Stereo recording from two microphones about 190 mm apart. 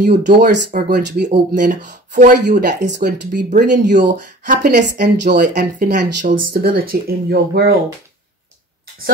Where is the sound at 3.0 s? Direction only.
40° right (ahead or behind).